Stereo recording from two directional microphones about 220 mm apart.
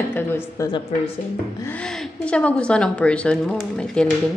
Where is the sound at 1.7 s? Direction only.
5° left (ahead or behind).